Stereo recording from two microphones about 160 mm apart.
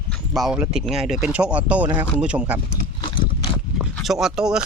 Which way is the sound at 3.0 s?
30° left (ahead or behind).